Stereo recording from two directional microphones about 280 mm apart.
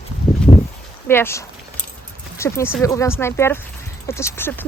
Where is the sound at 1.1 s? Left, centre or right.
Centre.